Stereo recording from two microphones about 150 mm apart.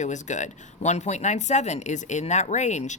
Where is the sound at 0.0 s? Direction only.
55° left (ahead or behind).